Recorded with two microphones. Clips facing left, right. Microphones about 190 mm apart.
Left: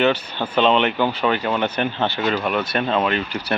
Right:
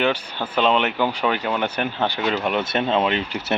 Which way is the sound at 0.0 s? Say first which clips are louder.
Left 3 dB; 10° right (ahead or behind).